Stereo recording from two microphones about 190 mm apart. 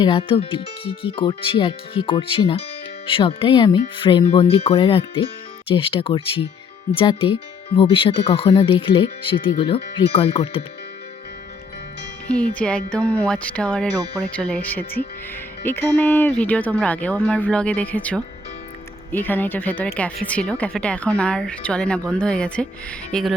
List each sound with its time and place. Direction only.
0.0 s speech: 25° left (ahead or behind)
12.3 s speech: 5° left (ahead or behind)
14.0 s speech: 20° right (ahead or behind)
14.3 s speech: 5° left (ahead or behind)